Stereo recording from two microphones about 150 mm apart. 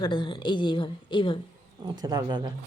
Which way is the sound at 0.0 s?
30° left (ahead or behind).